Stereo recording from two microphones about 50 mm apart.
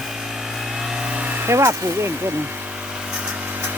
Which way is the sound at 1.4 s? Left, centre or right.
Right.